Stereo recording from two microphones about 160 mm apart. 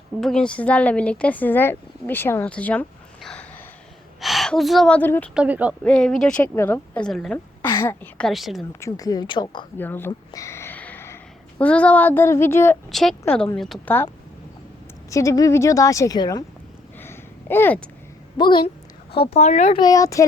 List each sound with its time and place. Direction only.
0.2 s speech: 5° left (ahead or behind)
5.3 s speech: 10° right (ahead or behind)
5.8 s speech: 5° left (ahead or behind)
7.6 s speech: 20° left (ahead or behind)
8.3 s speech: centre (ahead or behind)
8.8 s a woman's voice: 25° left (ahead or behind)
9.7 s speech: 10° left (ahead or behind)
10.1 s a sound: 20° left (ahead or behind)
12.9 s speech: centre (ahead or behind)
15.1 s a woman's voice: 20° left (ahead or behind)
17.0 s a sound: 15° left (ahead or behind)
18.3 s a woman's voice: 30° left (ahead or behind); by 19.7 s 45° left (ahead or behind)
19.7 s a woman's voice: 25° left (ahead or behind)